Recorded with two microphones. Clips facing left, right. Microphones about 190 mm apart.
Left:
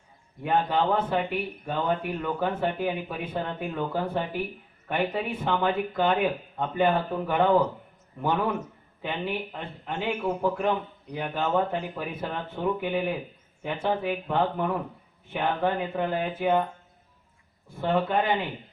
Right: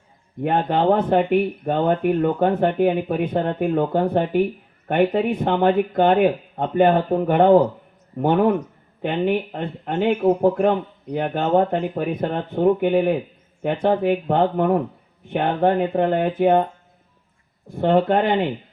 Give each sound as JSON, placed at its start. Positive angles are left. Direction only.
{"t": 0.4, "sound": "speech", "side_deg": -50}
{"t": 17.7, "sound": "speech", "side_deg": -45}